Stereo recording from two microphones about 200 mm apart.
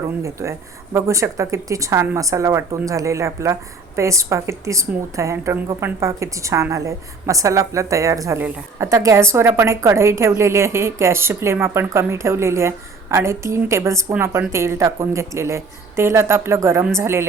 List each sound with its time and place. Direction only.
0.2 s speech: 15° right (ahead or behind)